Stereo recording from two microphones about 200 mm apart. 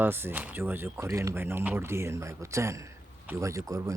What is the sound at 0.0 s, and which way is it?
Speech, 10° right (ahead or behind).